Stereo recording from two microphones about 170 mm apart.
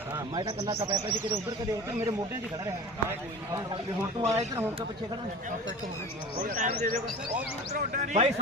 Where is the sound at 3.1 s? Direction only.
20° right (ahead or behind).